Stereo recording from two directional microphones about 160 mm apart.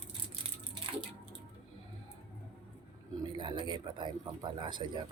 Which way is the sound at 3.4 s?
30° right (ahead or behind).